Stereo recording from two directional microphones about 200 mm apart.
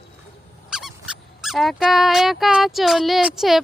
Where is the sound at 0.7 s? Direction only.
Centre (ahead or behind).